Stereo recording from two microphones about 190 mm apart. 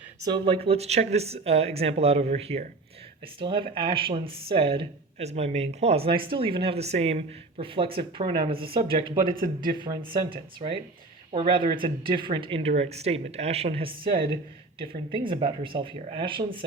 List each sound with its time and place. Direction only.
0.2 s speech: 20° right (ahead or behind)